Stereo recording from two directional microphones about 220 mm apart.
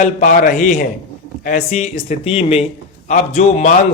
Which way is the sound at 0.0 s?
35° left (ahead or behind).